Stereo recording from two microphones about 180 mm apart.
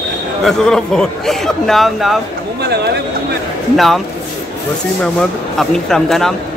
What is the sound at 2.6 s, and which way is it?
Speech, 65° right (ahead or behind).